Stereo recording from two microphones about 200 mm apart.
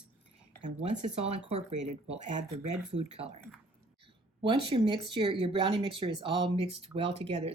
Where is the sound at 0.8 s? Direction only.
30° right (ahead or behind).